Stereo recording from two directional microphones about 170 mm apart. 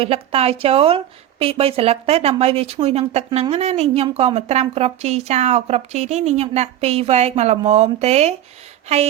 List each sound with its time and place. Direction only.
0.0 s a woman's voice: 35° right (ahead or behind)